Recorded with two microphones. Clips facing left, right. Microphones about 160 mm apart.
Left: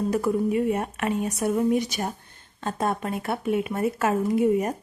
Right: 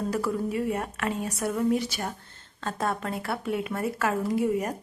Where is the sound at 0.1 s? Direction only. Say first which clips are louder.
Left 5 dB; 20° left (ahead or behind).